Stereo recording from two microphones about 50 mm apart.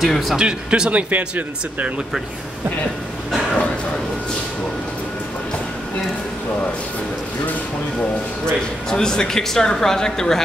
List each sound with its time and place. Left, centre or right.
0.0 s speech: centre
0.4 s speech: centre
8.5 s speech: centre